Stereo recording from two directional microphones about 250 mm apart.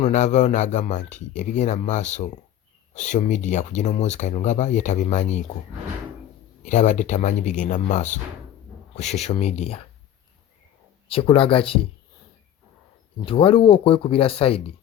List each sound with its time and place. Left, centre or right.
0.0 s speech: left
6.7 s speech: left
11.1 s speech: left
13.2 s speech: left